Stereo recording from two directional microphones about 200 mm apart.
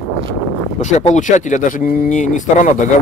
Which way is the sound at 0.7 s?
35° left (ahead or behind).